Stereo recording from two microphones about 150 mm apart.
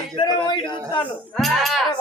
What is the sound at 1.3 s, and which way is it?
Music, centre (ahead or behind).